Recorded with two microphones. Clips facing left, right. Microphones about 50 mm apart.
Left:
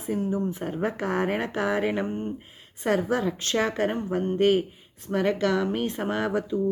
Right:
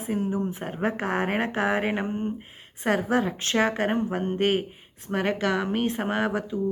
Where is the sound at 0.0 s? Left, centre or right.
Right.